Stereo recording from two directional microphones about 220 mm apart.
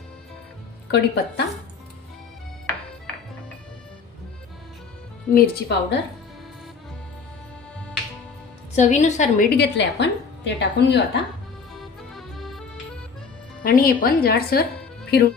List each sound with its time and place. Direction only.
0.9 s a woman's voice: 50° left (ahead or behind)
5.3 s a woman's voice: 50° left (ahead or behind)
8.7 s a woman's voice: 30° left (ahead or behind)
9.6 s a woman's voice: 50° left (ahead or behind)
12.1 s accordion: centre (ahead or behind)
13.7 s a woman's voice: 40° left (ahead or behind)